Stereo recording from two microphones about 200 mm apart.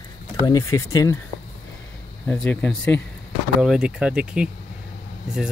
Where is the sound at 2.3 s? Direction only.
5° left (ahead or behind).